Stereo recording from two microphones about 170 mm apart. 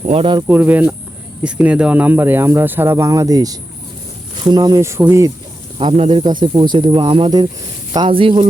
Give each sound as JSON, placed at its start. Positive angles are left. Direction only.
{"t": 0.0, "sound": "speech", "side_deg": -35}
{"t": 0.4, "sound": "speech", "side_deg": -10}
{"t": 5.8, "sound": "speech", "side_deg": -30}